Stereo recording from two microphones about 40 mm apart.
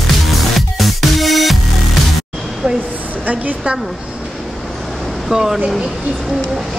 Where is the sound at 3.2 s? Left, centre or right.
Right.